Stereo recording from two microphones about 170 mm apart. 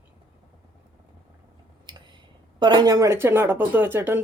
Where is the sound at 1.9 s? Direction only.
30° right (ahead or behind).